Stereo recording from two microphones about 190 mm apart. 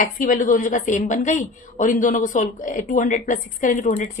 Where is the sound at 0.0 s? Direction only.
45° left (ahead or behind).